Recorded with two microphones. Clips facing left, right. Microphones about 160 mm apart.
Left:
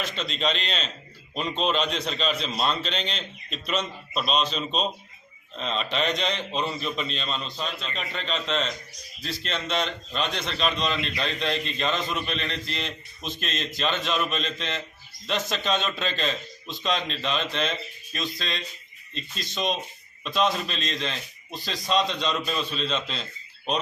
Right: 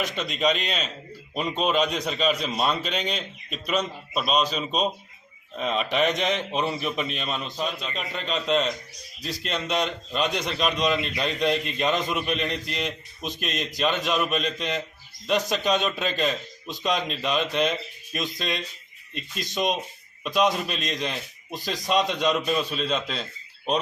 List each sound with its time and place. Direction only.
0.0 s a man's voice: 15° right (ahead or behind)
20.2 s a man's voice: 10° right (ahead or behind)